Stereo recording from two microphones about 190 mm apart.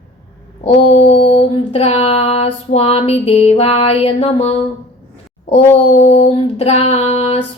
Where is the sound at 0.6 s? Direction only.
30° left (ahead or behind).